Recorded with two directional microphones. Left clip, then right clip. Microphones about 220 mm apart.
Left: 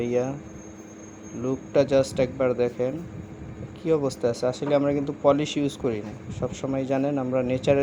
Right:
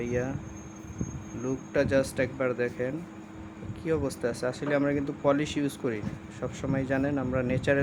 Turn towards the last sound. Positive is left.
turn(degrees=10)  # may be behind; listen again after turning